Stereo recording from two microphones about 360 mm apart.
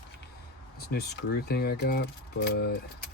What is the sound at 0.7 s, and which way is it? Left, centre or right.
Speech, left.